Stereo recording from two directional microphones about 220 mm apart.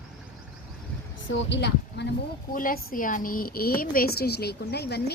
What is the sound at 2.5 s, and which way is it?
A woman's voice, 40° left (ahead or behind).